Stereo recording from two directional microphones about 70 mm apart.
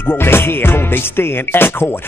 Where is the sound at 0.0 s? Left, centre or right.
Left.